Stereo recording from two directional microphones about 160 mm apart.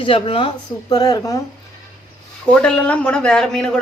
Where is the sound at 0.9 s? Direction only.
25° left (ahead or behind).